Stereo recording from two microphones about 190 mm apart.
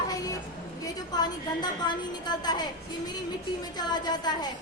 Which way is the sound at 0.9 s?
20° left (ahead or behind).